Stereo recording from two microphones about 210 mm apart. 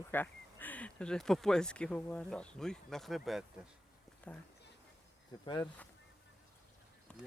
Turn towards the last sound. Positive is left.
turn(degrees=5)  # may be behind; listen again after turning